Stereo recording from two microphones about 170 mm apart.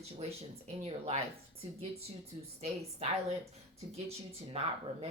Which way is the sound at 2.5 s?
40° right (ahead or behind).